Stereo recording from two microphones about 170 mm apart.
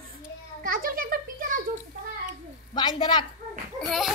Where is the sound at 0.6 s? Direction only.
60° right (ahead or behind).